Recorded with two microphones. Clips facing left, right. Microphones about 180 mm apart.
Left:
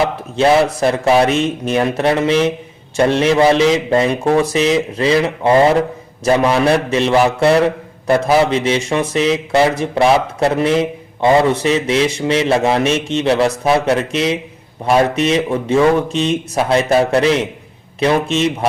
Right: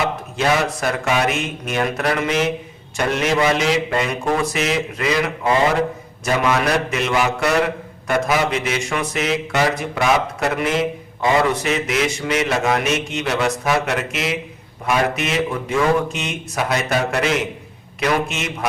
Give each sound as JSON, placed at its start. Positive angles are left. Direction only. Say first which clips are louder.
{"t": 0.3, "sound": "a man's voice", "louder": "left 8 dB", "side_deg": 30}